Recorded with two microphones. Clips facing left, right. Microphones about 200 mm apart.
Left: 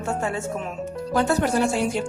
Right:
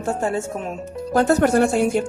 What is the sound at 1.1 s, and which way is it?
Speech, 45° right (ahead or behind).